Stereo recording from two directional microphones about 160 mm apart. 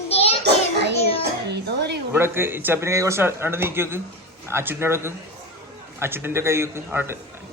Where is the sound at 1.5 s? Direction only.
90° right.